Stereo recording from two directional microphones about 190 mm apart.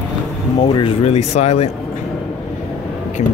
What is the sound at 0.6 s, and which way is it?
Speech, 30° left (ahead or behind).